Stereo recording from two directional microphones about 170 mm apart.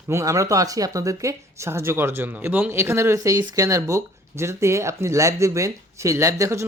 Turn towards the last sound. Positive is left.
turn(degrees=-15)  # may be behind; listen again after turning